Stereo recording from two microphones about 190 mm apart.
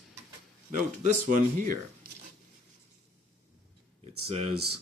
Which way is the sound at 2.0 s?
50° right (ahead or behind).